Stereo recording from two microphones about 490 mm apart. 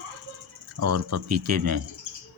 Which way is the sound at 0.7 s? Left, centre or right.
Right.